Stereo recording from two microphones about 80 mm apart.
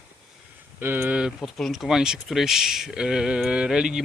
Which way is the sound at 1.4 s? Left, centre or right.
Centre.